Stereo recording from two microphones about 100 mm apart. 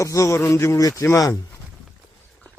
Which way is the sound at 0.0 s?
30° left (ahead or behind).